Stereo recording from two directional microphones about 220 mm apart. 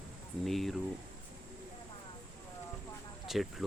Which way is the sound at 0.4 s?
Centre (ahead or behind).